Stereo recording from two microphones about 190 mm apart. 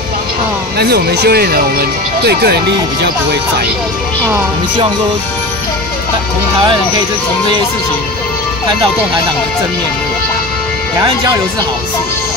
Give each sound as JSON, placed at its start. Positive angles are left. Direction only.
{"t": 0.7, "sound": "speech", "side_deg": -60}